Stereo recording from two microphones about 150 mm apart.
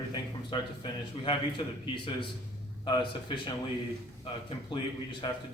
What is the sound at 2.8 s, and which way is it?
Speech, 30° left (ahead or behind).